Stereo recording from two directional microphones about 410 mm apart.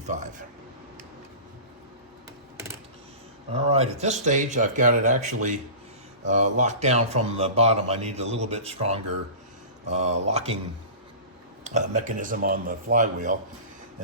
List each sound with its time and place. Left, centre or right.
0.0 s a man's voice: centre
2.6 s typing: centre
3.5 s speech: centre
11.6 s speech: centre